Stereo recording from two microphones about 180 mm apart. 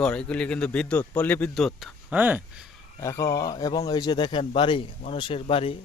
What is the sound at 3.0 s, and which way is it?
Speech, 15° left (ahead or behind).